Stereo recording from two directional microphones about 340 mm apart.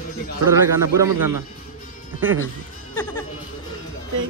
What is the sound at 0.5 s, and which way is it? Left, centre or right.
Speech, centre.